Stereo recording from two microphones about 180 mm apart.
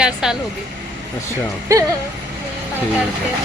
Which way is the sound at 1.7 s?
15° right (ahead or behind).